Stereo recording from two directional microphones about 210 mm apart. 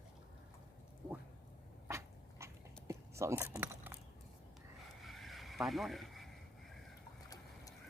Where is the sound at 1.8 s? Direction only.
15° right (ahead or behind).